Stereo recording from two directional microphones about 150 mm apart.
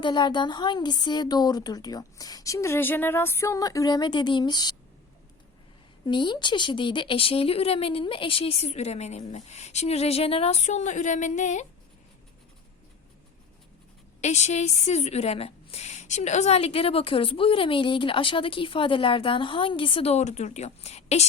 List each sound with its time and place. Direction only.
0.0 s a woman's voice: 30° left (ahead or behind)
6.1 s a woman's voice: 30° left (ahead or behind); by 11.6 s 55° left (ahead or behind)
14.2 s a woman's voice: 50° left (ahead or behind)